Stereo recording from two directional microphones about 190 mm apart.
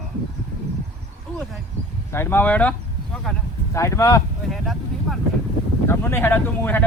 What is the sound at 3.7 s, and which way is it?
Speech, 15° left (ahead or behind).